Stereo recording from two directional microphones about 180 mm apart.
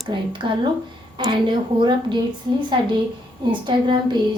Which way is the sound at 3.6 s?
25° right (ahead or behind).